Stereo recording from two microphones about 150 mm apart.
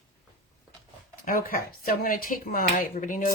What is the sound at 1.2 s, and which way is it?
Speech, 70° left (ahead or behind).